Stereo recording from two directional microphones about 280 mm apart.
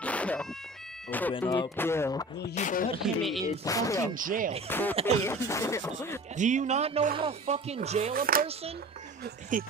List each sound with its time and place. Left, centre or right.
0.0 s insect: centre
1.4 s speech: centre
2.5 s speech: left
3.0 s speech: centre
3.6 s speech: centre
4.1 s speech: right
4.6 s speech: centre
6.3 s speech: right